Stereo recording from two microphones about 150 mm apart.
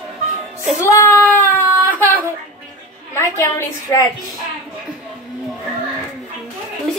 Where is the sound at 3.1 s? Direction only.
20° left (ahead or behind).